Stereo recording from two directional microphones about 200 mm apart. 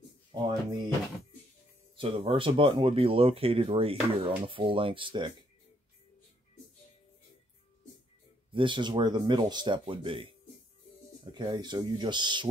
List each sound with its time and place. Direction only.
0.3 s speech: 20° right (ahead or behind)
2.0 s speech: 25° right (ahead or behind)
8.5 s speech: 25° right (ahead or behind)
11.3 s speech: 20° right (ahead or behind)